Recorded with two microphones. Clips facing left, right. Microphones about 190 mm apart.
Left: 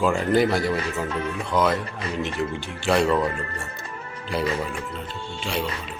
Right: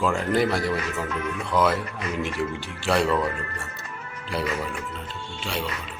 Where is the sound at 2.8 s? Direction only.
Centre (ahead or behind).